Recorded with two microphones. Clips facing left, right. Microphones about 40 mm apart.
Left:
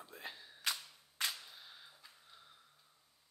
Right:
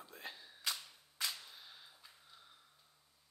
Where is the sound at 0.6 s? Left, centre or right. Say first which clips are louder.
Left 2 dB; left.